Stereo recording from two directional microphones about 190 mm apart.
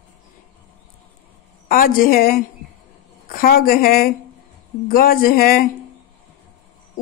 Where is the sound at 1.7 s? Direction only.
50° left (ahead or behind).